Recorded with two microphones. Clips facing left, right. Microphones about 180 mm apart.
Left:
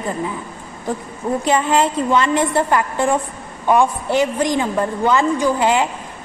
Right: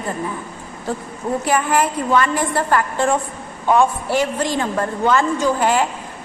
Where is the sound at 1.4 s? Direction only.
20° left (ahead or behind).